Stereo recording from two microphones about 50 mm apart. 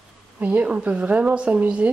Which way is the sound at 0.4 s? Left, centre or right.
Right.